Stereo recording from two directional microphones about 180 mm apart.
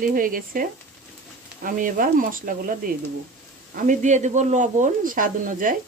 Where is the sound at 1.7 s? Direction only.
50° right (ahead or behind).